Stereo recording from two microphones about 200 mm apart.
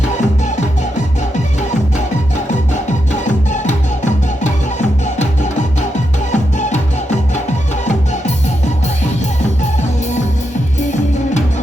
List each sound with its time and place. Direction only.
3.2 s music: 35° left (ahead or behind)
6.3 s music: 35° left (ahead or behind)